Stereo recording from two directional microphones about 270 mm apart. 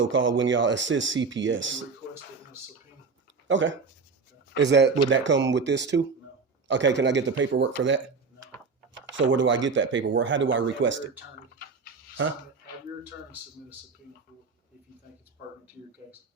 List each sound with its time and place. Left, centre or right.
0.0 s speech: right
3.5 s speech: right